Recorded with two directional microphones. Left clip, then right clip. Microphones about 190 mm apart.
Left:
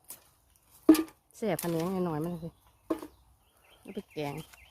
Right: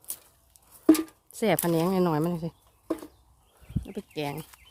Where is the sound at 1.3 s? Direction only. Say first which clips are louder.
Right 9 dB; 30° right (ahead or behind).